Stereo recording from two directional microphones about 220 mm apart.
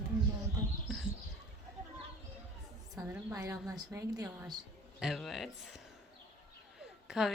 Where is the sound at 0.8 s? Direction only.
Centre (ahead or behind).